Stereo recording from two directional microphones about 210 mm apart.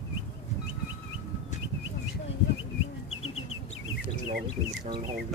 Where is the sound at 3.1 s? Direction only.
80° left.